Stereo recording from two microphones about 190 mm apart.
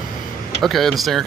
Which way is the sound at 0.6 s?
Centre (ahead or behind).